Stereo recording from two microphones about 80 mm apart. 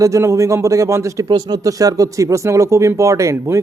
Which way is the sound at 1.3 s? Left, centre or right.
Right.